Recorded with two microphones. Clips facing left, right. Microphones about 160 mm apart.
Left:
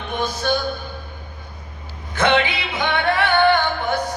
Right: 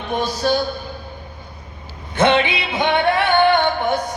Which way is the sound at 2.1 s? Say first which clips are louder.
Right 2 dB; 25° right (ahead or behind).